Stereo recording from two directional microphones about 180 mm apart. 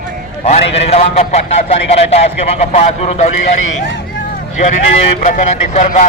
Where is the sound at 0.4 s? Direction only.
35° left (ahead or behind).